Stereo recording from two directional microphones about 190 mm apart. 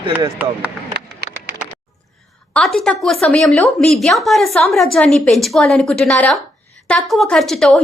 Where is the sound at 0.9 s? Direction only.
60° right (ahead or behind).